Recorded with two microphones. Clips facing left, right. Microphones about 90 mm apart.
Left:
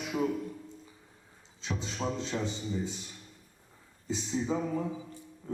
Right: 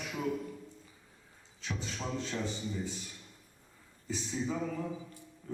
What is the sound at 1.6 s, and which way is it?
A man's voice, 20° left (ahead or behind).